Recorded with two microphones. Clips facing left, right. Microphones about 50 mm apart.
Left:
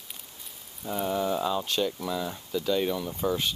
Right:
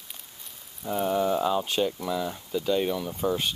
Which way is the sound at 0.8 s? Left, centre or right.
Centre.